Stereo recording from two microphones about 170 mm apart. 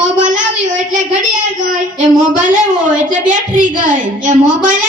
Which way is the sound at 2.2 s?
50° right (ahead or behind).